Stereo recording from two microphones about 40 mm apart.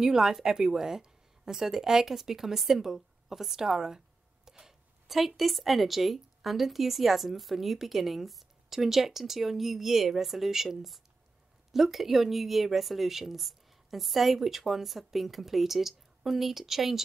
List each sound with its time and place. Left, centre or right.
0.0 s a woman's voice: centre
4.5 s a sound: centre
5.0 s a woman's voice: centre